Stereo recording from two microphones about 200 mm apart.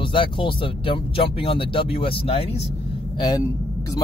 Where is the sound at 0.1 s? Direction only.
25° left (ahead or behind).